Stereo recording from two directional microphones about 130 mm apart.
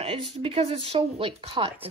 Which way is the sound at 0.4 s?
50° right (ahead or behind).